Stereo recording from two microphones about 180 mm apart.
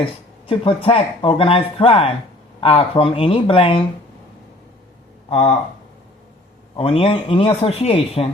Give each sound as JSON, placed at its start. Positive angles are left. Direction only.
{"t": 0.0, "sound": "speech", "side_deg": 30}
{"t": 6.7, "sound": "speech", "side_deg": 30}